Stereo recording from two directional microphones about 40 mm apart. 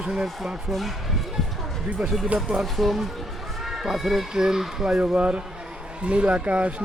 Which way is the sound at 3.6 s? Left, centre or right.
Centre.